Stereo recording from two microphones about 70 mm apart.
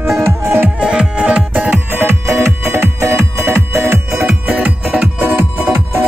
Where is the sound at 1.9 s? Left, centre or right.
Right.